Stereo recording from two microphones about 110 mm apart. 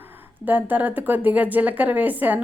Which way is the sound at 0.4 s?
15° right (ahead or behind).